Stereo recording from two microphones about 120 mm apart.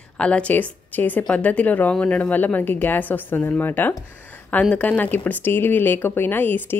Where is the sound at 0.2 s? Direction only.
10° left (ahead or behind).